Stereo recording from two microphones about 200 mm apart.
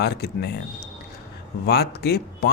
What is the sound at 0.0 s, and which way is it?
Speech, 55° left (ahead or behind).